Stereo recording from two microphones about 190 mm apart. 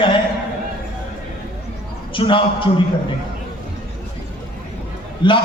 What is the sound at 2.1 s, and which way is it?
Speech, 25° left (ahead or behind).